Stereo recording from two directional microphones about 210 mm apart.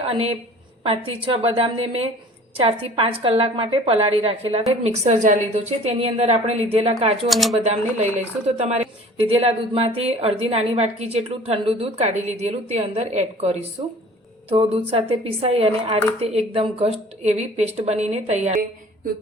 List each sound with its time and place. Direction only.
0.0 s a woman's voice: 30° right (ahead or behind)
7.3 s speech: centre (ahead or behind)
8.5 s a woman's voice: 30° right (ahead or behind)